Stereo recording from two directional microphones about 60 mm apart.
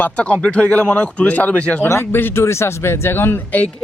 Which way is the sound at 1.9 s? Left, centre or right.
Left.